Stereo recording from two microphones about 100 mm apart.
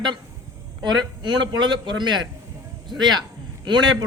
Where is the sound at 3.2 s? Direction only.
45° right (ahead or behind).